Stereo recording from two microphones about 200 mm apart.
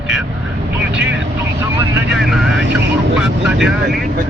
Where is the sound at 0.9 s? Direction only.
60° right (ahead or behind).